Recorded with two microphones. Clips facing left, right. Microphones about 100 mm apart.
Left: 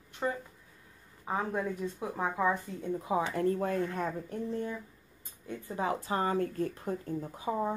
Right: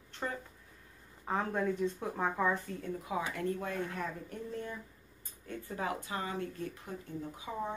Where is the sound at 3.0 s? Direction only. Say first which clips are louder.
Left 7 dB; 30° left (ahead or behind).